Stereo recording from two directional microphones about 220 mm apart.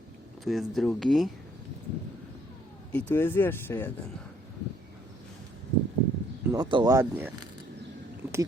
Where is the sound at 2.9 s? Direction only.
5° left (ahead or behind).